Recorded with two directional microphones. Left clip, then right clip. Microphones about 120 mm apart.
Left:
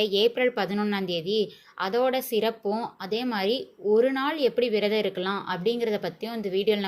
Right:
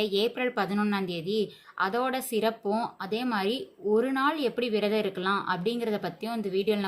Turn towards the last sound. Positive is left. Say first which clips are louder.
# left 3 dB
turn(degrees=15)  # may be behind; listen again after turning